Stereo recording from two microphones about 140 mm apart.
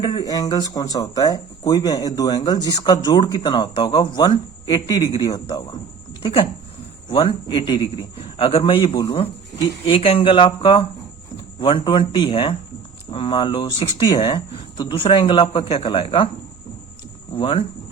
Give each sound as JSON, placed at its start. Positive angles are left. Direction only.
{"t": 0.0, "sound": "speech", "side_deg": 30}
{"t": 7.1, "sound": "speech", "side_deg": 35}
{"t": 17.3, "sound": "speech", "side_deg": 40}